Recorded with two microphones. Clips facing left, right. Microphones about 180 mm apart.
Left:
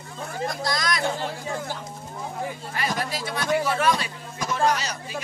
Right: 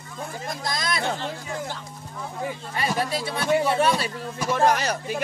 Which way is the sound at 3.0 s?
30° right (ahead or behind).